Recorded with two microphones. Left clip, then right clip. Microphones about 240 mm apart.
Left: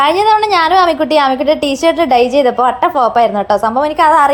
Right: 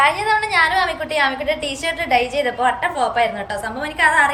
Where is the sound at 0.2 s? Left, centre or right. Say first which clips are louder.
Left 7 dB; left.